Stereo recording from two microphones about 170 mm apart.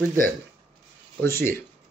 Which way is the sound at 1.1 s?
15° left (ahead or behind).